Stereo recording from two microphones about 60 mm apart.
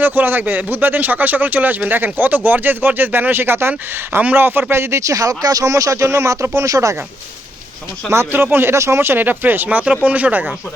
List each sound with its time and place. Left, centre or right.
0.0 s speech: right
4.7 s speech: right
8.3 s speech: right
8.7 s speech: right
9.6 s speech: right